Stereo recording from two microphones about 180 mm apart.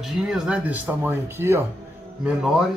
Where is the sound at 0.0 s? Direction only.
5° right (ahead or behind).